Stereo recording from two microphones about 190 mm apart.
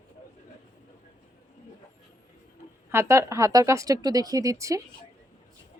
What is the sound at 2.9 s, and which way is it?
Speech, 15° right (ahead or behind).